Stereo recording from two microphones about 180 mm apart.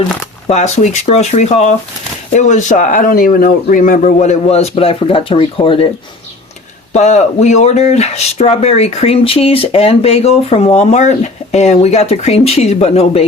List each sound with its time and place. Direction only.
0.4 s speech: 40° left (ahead or behind)
6.9 s speech: 40° left (ahead or behind)